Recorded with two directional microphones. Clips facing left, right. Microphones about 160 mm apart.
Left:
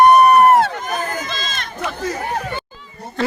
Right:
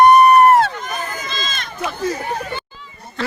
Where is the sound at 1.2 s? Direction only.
60° left (ahead or behind).